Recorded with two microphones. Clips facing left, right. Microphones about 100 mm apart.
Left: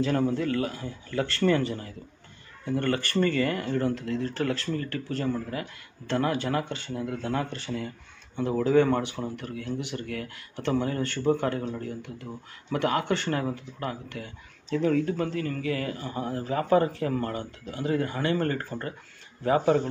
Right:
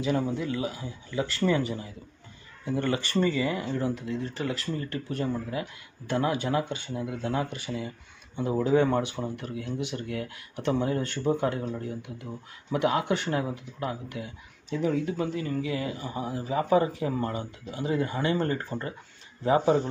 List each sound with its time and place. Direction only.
0.0 s speech: 10° right (ahead or behind)
4.7 s speech: 20° right (ahead or behind)